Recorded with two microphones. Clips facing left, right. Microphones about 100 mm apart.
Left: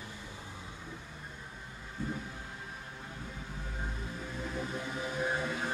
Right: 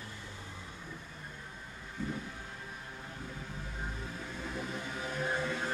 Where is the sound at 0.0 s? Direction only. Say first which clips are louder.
Left 1 dB; 15° left (ahead or behind).